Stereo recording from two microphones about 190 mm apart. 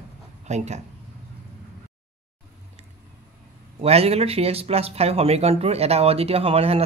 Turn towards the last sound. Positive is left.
turn(degrees=-30)  # may be behind; listen again after turning